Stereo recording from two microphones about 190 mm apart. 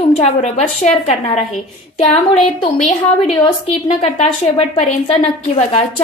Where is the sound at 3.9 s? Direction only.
35° left (ahead or behind).